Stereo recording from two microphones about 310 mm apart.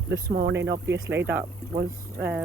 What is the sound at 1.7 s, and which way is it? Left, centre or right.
Speech, right.